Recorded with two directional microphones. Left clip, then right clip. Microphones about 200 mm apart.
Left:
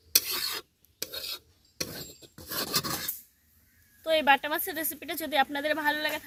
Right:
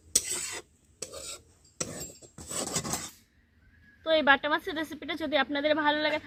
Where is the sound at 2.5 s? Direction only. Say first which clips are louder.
Left 3 dB; 45° left (ahead or behind).